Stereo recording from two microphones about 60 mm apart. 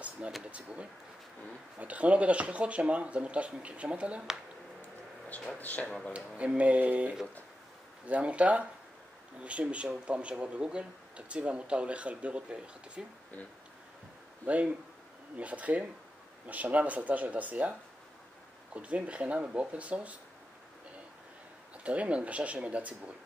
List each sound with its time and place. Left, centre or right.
0.5 s speech: centre
5.6 s speech: left
5.9 s speech: centre
6.1 s speech: right
14.4 s speech: right
21.8 s speech: right